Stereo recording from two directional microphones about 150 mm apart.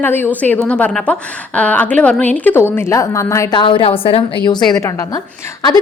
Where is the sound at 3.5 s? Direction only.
35° left (ahead or behind).